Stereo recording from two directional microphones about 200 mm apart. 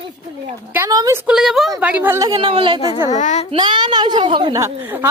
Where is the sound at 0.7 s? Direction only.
15° right (ahead or behind).